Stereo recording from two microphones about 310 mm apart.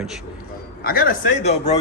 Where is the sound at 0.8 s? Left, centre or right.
Left.